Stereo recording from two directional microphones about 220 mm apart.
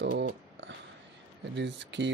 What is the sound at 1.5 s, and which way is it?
Speech, 50° right (ahead or behind).